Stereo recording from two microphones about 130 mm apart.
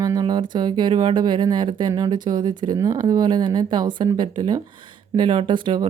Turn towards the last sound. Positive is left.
turn(degrees=-35)  # may be behind; listen again after turning